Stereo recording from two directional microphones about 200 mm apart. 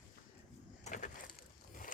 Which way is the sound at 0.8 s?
40° left (ahead or behind).